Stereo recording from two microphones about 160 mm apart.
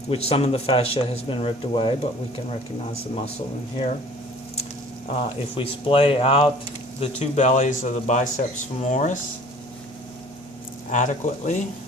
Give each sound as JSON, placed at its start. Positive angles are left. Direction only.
{"t": 0.1, "sound": "speech", "side_deg": 40}
{"t": 5.1, "sound": "speech", "side_deg": 35}
{"t": 7.0, "sound": "speech", "side_deg": 45}
{"t": 10.8, "sound": "speech", "side_deg": 50}